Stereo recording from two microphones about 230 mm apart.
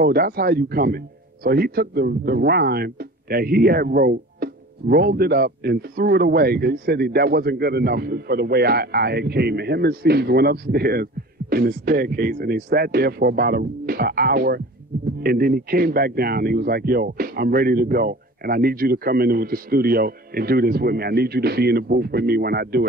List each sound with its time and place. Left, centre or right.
0.0 s speech: right